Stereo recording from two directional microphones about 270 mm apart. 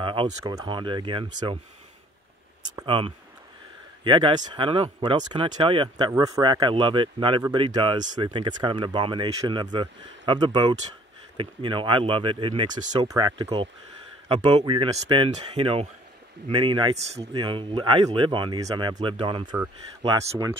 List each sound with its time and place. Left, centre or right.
0.0 s speech: centre
2.7 s speech: centre